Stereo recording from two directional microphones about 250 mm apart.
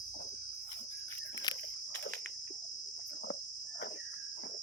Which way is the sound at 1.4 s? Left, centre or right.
Centre.